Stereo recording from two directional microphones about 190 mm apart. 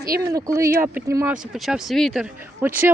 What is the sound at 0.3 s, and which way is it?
Speech, 15° right (ahead or behind).